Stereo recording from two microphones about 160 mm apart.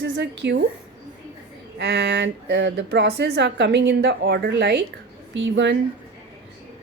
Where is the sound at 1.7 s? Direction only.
90° right.